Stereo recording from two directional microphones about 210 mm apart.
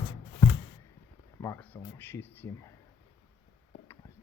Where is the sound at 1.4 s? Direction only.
10° left (ahead or behind).